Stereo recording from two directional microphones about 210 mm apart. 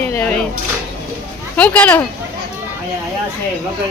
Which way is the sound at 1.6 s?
10° left (ahead or behind).